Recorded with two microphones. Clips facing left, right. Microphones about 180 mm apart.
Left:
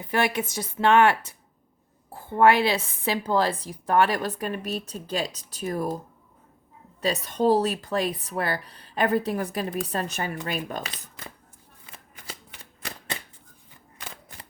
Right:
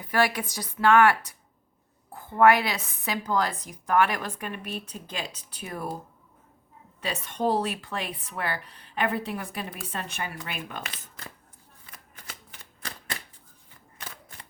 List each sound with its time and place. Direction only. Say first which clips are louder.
0.0 s a woman's voice: even; 25° left (ahead or behind); by 5.9 s 40° left (ahead or behind)
7.0 s speech: left 5 dB; 40° left (ahead or behind)